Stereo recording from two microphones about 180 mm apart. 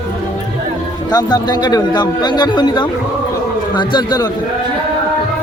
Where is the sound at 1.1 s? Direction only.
20° left (ahead or behind).